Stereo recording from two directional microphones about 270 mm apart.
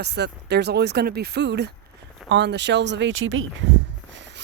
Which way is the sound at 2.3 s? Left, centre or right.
Right.